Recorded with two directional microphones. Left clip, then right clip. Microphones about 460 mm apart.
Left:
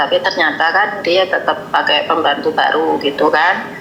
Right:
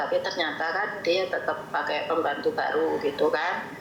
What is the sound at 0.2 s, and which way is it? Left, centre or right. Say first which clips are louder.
A woman's voice: left 14 dB; centre.